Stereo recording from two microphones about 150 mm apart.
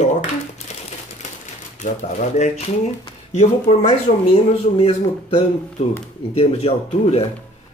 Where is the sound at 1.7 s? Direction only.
50° left (ahead or behind).